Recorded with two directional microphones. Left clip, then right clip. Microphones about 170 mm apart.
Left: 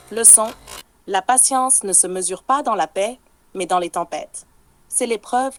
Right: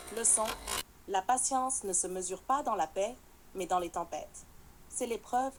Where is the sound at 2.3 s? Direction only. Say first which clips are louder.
Left 12 dB; 45° left (ahead or behind).